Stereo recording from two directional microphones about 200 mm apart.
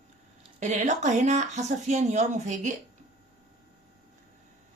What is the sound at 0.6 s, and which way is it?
A woman's voice, 35° right (ahead or behind).